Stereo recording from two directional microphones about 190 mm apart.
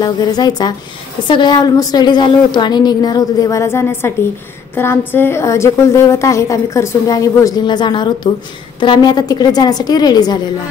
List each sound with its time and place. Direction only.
0.0 s a woman's voice: 20° left (ahead or behind)